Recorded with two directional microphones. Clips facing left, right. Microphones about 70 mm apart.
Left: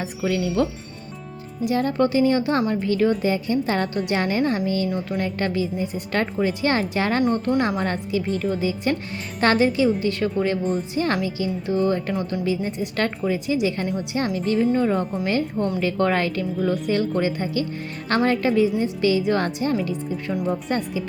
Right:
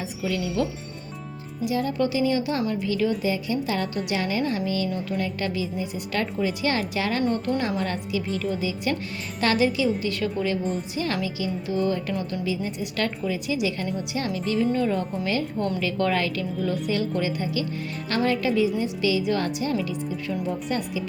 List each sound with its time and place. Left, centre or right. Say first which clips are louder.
0.2 s a woman's voice: left 4 dB; left
14.7 s a woman's voice: left 3 dB; left